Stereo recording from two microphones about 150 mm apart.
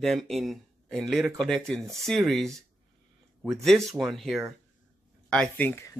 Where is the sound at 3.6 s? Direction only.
Centre (ahead or behind).